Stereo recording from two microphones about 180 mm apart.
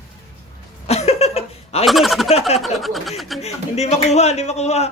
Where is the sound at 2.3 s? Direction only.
35° left (ahead or behind).